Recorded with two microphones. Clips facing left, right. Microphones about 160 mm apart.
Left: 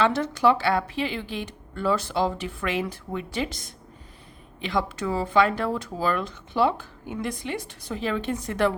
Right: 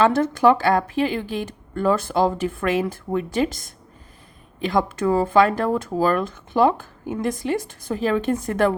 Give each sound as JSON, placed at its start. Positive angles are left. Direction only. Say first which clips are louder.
{"t": 0.0, "sound": "speech", "louder": "right 5 dB", "side_deg": -50}